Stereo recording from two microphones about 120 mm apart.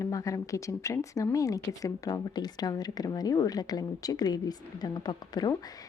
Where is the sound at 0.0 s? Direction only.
30° left (ahead or behind).